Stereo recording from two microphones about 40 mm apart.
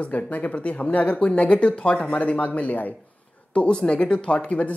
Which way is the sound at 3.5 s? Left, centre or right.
Left.